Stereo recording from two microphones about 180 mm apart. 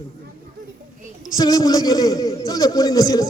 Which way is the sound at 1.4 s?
20° left (ahead or behind).